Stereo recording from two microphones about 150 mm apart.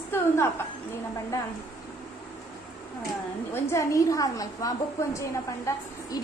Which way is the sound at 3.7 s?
20° left (ahead or behind).